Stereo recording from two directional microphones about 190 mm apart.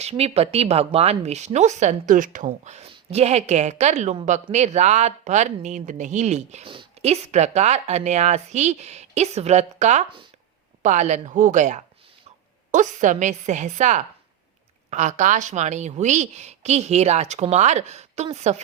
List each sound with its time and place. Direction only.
0.0 s speech: 35° right (ahead or behind)